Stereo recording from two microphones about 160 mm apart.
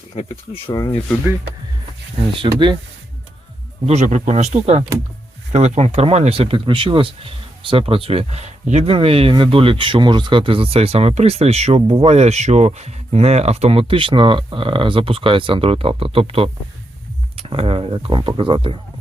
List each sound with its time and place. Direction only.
0.7 s speech: 20° left (ahead or behind)
2.4 s speech: 30° right (ahead or behind)
3.8 s speech: 45° right (ahead or behind)